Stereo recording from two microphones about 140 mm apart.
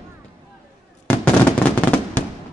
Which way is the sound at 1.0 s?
10° left (ahead or behind).